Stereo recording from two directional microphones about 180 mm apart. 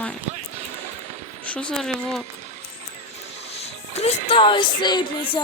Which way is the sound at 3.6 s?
35° left (ahead or behind).